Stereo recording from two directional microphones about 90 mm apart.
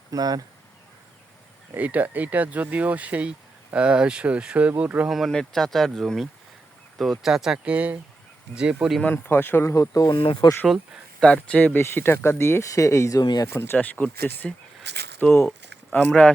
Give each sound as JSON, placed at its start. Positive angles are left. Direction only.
{"t": 0.1, "sound": "speech", "side_deg": -45}
{"t": 1.7, "sound": "speech", "side_deg": -20}
{"t": 5.1, "sound": "speech", "side_deg": 5}
{"t": 9.1, "sound": "speech", "side_deg": 25}
{"t": 10.1, "sound": "speech", "side_deg": 65}
{"t": 10.7, "sound": "speech", "side_deg": 0}
{"t": 11.3, "sound": "speech", "side_deg": 15}
{"t": 13.2, "sound": "speech", "side_deg": 50}
{"t": 13.5, "sound": "speech", "side_deg": 25}
{"t": 13.7, "sound": "speech", "side_deg": 15}